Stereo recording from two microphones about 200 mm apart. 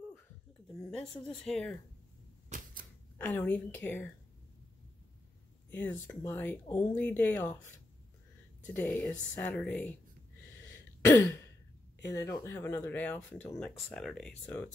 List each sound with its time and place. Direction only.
0.7 s speech: 5° left (ahead or behind)
2.5 s typewriter: 45° right (ahead or behind)
3.2 s speech: 10° left (ahead or behind)
5.7 s speech: 10° left (ahead or behind)
11.1 s speech: 15° left (ahead or behind)